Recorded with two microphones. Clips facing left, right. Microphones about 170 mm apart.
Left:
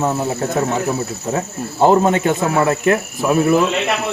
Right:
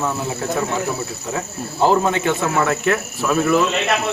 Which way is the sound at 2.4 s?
20° left (ahead or behind).